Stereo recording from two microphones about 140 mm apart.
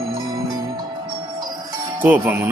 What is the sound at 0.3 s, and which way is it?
Music, 30° right (ahead or behind).